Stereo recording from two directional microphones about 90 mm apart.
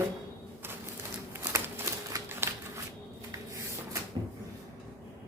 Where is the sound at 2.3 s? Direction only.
25° right (ahead or behind).